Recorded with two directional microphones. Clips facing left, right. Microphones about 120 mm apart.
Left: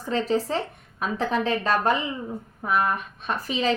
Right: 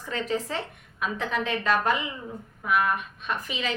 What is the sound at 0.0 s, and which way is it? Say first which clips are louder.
Speech: left 5 dB; 35° left (ahead or behind).